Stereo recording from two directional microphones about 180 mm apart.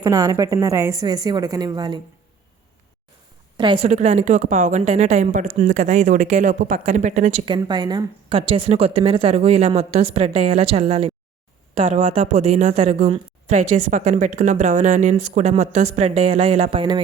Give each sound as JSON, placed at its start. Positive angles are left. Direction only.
{"t": 0.0, "sound": "a woman's voice", "side_deg": -20}
{"t": 3.6, "sound": "a woman's voice", "side_deg": -25}
{"t": 3.8, "sound": "a woman's voice", "side_deg": -35}